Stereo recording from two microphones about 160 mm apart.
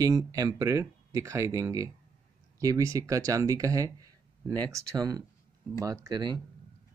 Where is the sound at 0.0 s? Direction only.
20° right (ahead or behind).